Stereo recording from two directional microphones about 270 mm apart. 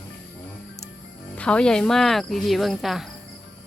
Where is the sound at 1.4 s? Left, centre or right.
Centre.